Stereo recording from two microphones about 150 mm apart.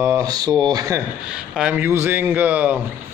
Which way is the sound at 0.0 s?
20° right (ahead or behind).